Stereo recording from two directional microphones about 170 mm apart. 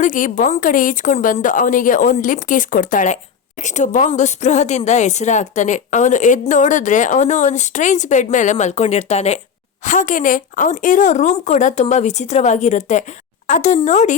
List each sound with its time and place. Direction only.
0.0 s a woman's voice: 50° left (ahead or behind)